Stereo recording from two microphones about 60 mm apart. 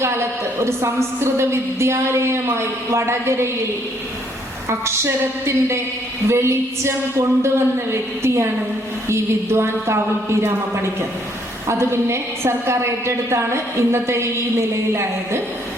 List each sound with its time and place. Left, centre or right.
0.6 s a woman's voice: right
6.2 s a woman's voice: right
11.7 s a woman's voice: right